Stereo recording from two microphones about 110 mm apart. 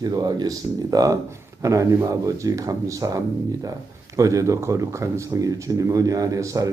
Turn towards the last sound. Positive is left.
turn(degrees=-30)  # may be behind; listen again after turning